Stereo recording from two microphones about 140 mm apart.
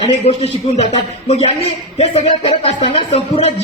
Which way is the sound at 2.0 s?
45° left (ahead or behind).